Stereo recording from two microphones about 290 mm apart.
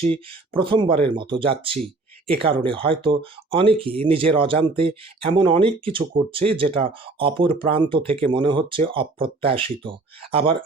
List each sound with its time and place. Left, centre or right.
0.0 s speech: centre
1.7 s a sound: centre
2.4 s speech: centre